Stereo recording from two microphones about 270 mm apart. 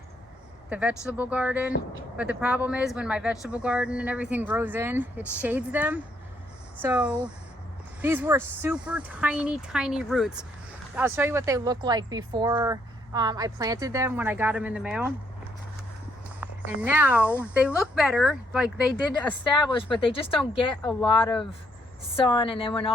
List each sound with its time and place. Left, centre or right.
0.7 s speech: centre
16.4 s speech: centre
19.7 s a woman's voice: centre
20.8 s speech: centre
22.1 s a woman's voice: centre